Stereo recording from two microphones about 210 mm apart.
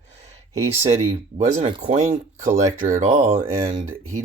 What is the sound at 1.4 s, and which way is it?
Speech, 25° right (ahead or behind).